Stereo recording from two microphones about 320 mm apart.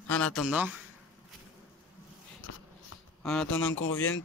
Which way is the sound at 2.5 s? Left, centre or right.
Left.